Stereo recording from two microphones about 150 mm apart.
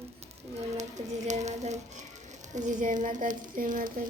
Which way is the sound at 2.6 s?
55° right (ahead or behind).